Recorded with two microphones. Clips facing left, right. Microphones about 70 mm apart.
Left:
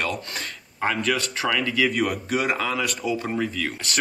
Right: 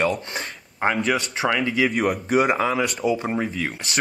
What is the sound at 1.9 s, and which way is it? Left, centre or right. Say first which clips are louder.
Speech: right 4 dB; right.